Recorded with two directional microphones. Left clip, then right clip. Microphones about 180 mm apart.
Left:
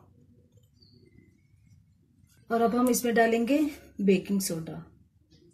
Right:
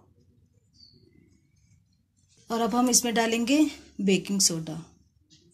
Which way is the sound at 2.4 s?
60° right (ahead or behind).